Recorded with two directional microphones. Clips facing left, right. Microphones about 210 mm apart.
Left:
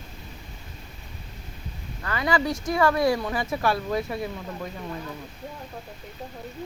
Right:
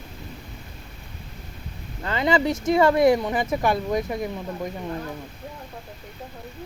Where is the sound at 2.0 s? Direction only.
25° right (ahead or behind).